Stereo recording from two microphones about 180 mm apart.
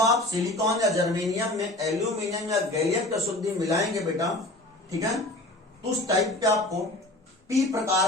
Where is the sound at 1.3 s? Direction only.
15° right (ahead or behind).